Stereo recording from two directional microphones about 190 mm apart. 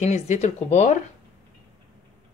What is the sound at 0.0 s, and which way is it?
Speech, 35° left (ahead or behind).